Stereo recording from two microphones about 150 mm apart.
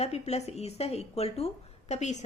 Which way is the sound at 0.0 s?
45° left (ahead or behind).